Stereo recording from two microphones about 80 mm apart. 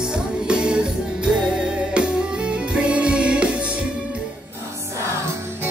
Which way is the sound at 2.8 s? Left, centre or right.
Centre.